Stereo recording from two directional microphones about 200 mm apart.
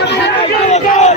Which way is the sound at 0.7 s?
35° left (ahead or behind).